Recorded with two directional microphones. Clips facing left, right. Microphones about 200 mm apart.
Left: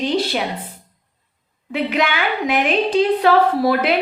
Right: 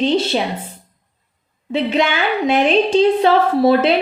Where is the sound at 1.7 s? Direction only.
25° right (ahead or behind).